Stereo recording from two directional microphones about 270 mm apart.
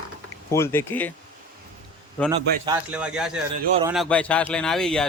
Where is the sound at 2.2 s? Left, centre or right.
Centre.